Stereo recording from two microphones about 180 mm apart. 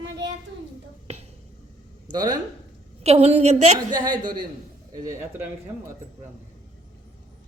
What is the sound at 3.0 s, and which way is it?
Speech, 35° right (ahead or behind).